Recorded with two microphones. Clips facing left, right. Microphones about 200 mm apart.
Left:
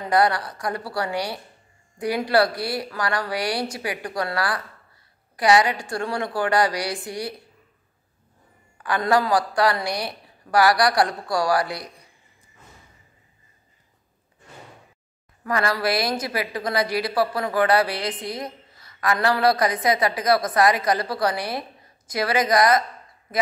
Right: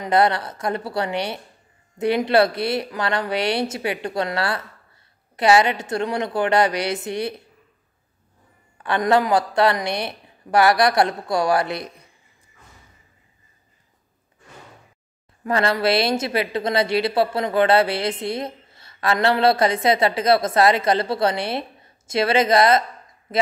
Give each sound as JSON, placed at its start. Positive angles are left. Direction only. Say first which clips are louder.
{"t": 0.0, "sound": "a woman's voice", "louder": "right 2 dB", "side_deg": -25}
{"t": 8.8, "sound": "a woman's voice", "louder": "right 2 dB", "side_deg": -25}
{"t": 15.4, "sound": "a woman's voice", "louder": "right 3 dB", "side_deg": -25}